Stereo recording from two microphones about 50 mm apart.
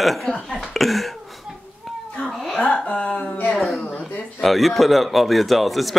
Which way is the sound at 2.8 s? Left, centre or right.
Centre.